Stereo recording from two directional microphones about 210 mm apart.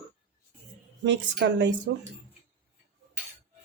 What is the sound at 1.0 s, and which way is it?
Speech, 55° right (ahead or behind).